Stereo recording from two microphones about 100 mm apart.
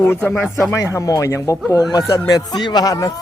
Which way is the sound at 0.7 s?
30° left (ahead or behind).